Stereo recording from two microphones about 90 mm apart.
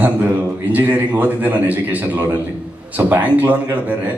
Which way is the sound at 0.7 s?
15° right (ahead or behind).